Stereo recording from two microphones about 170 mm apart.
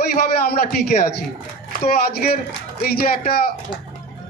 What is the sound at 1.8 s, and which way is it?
A man's voice, 65° left (ahead or behind).